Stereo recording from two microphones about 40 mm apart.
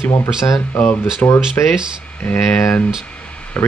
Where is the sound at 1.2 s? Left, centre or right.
Left.